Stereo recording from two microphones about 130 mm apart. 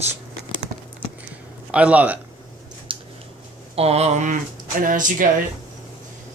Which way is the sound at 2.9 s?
40° right (ahead or behind).